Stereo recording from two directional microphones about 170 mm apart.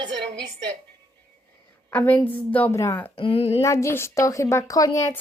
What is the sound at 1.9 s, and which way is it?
A woman's voice, 10° left (ahead or behind).